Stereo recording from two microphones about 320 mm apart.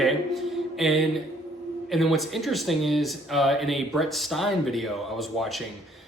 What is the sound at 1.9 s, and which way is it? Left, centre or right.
Speech, centre.